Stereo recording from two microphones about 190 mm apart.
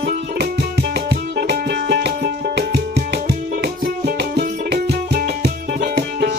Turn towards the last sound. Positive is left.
turn(degrees=-55)  # may be behind; listen again after turning